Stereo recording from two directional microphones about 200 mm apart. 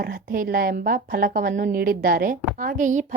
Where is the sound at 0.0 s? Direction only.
45° right (ahead or behind).